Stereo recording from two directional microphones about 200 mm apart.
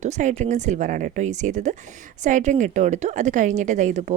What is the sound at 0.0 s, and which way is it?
Speech, 35° right (ahead or behind).